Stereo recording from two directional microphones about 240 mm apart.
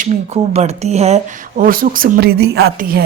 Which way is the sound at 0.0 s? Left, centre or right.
Right.